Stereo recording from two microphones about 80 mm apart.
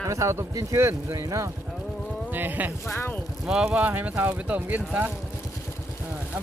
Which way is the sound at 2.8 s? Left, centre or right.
Left.